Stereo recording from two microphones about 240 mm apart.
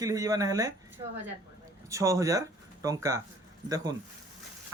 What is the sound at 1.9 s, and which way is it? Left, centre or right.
Speech, centre.